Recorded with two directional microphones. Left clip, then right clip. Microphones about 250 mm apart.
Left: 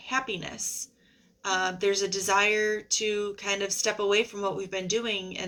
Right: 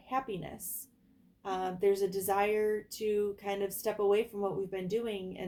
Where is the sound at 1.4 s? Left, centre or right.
Left.